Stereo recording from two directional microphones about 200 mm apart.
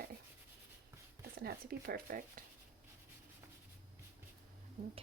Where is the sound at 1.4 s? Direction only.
50° right (ahead or behind).